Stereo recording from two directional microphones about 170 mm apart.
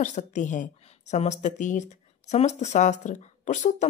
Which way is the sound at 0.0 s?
45° left (ahead or behind).